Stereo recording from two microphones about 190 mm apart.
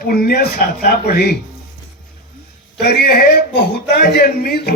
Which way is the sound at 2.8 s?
55° left (ahead or behind).